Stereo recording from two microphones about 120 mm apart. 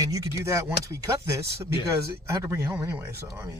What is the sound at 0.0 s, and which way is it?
Speech, 25° right (ahead or behind).